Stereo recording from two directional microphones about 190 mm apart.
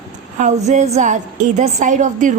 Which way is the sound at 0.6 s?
35° right (ahead or behind).